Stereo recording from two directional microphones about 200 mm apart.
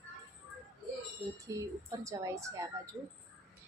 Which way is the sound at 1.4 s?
15° right (ahead or behind).